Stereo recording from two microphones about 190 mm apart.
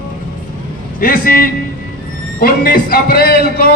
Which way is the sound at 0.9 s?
50° left (ahead or behind).